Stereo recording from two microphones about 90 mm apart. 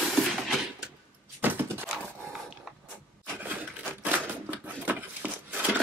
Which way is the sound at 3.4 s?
20° right (ahead or behind).